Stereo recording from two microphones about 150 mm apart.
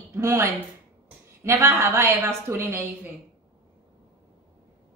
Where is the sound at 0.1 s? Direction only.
15° right (ahead or behind).